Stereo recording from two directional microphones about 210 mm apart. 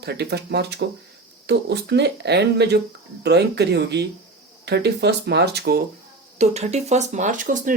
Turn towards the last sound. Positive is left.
turn(degrees=-35)  # may be behind; listen again after turning